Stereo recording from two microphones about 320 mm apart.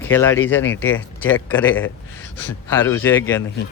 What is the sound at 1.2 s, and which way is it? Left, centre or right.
Speech, centre.